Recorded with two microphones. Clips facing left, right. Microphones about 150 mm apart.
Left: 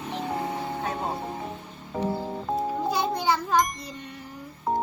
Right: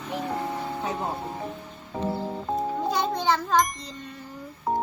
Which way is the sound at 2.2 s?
Centre (ahead or behind).